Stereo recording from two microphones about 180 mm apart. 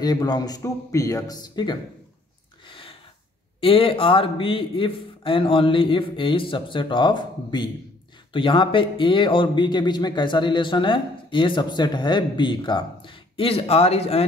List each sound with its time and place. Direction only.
0.0 s speech: 20° left (ahead or behind)
2.6 s a sound: 30° left (ahead or behind)
3.6 s speech: 30° left (ahead or behind)